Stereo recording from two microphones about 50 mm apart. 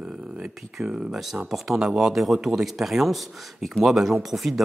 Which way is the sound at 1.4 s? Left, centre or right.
Centre.